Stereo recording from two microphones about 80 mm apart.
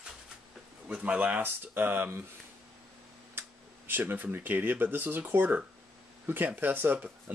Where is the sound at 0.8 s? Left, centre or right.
Centre.